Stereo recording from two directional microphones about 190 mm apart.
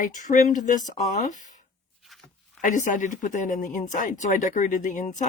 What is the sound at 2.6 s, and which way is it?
Speech, 40° left (ahead or behind).